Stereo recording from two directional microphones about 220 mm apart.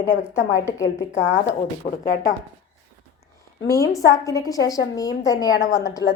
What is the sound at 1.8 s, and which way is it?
Speech, 30° left (ahead or behind).